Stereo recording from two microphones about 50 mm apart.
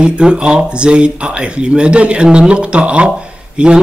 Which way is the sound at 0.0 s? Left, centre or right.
Centre.